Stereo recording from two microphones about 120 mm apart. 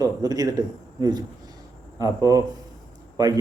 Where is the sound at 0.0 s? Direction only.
30° right (ahead or behind).